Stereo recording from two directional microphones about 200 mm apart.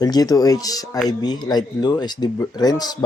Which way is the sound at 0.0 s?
20° left (ahead or behind).